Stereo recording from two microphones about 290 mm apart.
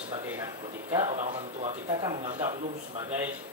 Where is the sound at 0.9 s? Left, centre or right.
Centre.